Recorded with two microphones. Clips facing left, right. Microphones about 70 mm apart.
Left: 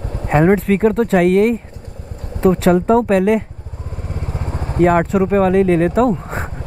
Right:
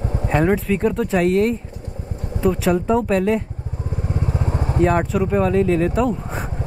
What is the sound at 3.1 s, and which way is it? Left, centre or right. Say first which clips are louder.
Speech: left 4 dB; left.